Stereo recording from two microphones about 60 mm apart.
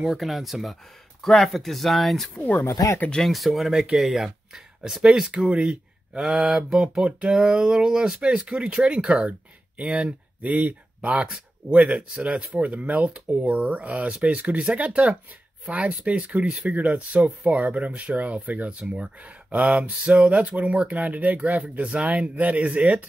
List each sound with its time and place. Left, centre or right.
0.0 s speech: centre
2.7 s speech: left
3.3 s speech: centre; by 22.8 s right